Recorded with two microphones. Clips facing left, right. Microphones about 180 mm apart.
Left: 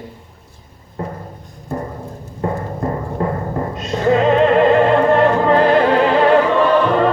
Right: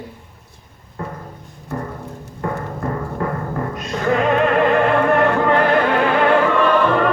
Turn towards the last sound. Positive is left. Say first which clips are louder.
# left 2 dB
turn(degrees=25)  # may be behind; listen again after turning